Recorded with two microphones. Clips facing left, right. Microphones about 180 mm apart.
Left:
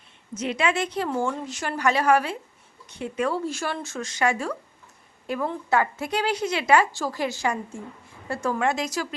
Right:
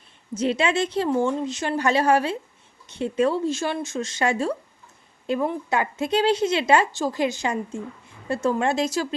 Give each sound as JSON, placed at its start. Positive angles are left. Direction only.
{"t": 0.3, "sound": "a woman's voice", "side_deg": -30}